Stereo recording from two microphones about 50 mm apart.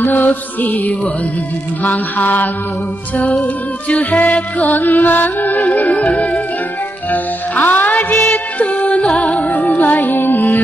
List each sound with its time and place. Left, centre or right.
0.0 s music: left